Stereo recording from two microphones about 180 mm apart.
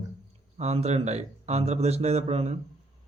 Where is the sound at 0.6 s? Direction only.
35° right (ahead or behind).